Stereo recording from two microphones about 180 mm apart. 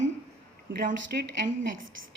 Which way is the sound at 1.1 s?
60° right (ahead or behind).